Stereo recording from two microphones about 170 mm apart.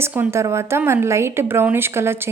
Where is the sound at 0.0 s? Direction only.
15° right (ahead or behind).